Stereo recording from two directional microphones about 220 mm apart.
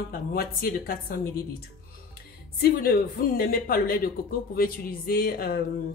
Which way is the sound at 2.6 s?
45° left (ahead or behind).